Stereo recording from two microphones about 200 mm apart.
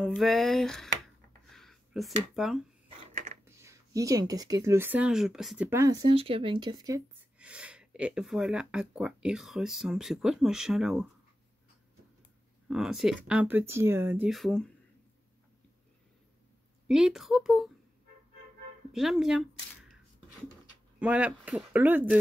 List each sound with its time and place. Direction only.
0.0 s speech: centre (ahead or behind)
1.5 s a sound: centre (ahead or behind)
2.3 s speech: centre (ahead or behind)
3.4 s speech: 15° right (ahead or behind)
7.3 s speech: 5° right (ahead or behind)
12.6 s speech: centre (ahead or behind)
16.8 s speech: 5° right (ahead or behind)
18.9 s speech: centre (ahead or behind)
21.0 s speech: 5° right (ahead or behind)